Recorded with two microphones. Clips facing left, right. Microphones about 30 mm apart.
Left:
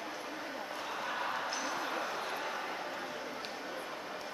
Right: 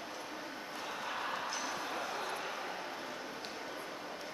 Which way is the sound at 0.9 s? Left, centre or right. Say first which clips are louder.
Left 2 dB; centre.